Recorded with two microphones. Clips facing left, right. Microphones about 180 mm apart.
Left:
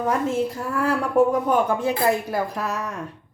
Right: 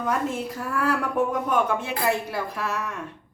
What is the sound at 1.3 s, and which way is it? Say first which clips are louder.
A woman's voice: left 3 dB; 35° left (ahead or behind).